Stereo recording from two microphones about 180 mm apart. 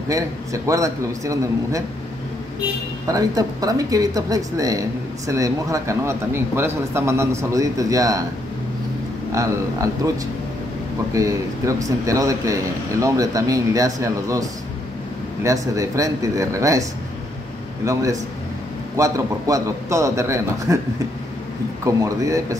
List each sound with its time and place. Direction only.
0.1 s a man's voice: 20° right (ahead or behind)
3.1 s speech: 20° right (ahead or behind)
9.3 s a man's voice: 15° right (ahead or behind)
11.1 s a man's voice: 20° right (ahead or behind)
15.4 s a man's voice: 20° right (ahead or behind)
17.8 s a man's voice: 20° right (ahead or behind)
21.8 s a man's voice: 15° right (ahead or behind)